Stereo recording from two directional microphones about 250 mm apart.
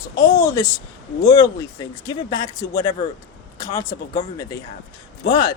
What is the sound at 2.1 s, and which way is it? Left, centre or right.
A man's voice, centre.